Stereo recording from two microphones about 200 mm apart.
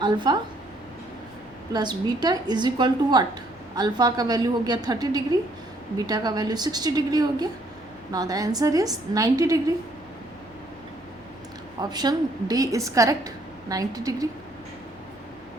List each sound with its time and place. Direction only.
0.0 s a woman's voice: 20° right (ahead or behind)
1.7 s a woman's voice: 20° right (ahead or behind)
11.8 s a woman's voice: 20° right (ahead or behind)